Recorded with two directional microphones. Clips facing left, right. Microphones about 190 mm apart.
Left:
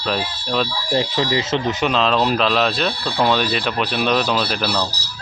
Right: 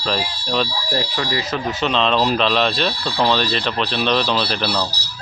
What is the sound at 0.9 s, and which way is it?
Speech, 20° left (ahead or behind).